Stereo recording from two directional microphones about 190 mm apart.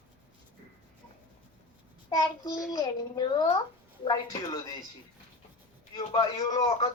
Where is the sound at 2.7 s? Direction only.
20° left (ahead or behind).